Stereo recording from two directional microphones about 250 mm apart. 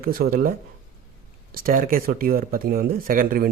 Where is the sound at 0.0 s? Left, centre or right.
Right.